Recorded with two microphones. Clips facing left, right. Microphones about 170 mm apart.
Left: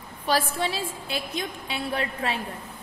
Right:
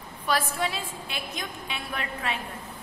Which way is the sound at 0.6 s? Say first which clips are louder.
Left 2 dB; 30° left (ahead or behind).